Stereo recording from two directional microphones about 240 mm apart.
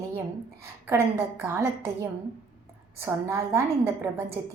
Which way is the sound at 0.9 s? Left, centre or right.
Centre.